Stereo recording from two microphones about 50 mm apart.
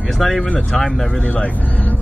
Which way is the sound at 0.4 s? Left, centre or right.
Left.